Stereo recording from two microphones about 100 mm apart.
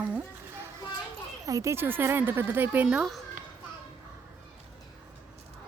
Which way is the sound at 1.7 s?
20° right (ahead or behind).